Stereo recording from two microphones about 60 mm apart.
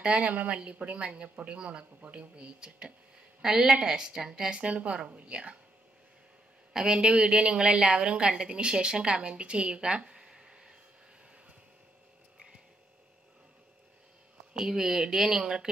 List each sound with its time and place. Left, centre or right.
0.0 s a woman's voice: centre
6.7 s a woman's voice: centre
14.5 s a woman's voice: centre